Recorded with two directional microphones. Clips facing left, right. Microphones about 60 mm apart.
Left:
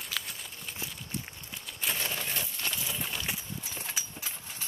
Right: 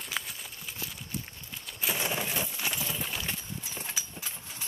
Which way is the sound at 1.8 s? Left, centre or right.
Centre.